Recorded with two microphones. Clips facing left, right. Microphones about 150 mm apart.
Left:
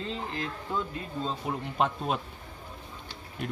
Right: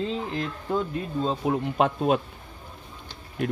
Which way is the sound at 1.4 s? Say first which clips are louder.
Right 5 dB; 65° right (ahead or behind).